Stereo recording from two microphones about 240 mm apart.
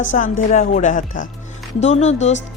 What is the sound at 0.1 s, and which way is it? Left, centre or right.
A woman's voice, left.